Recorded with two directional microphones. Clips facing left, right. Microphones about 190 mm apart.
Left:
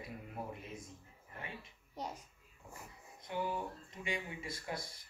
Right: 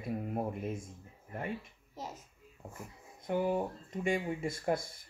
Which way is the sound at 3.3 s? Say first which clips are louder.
Right 8 dB; 50° right (ahead or behind).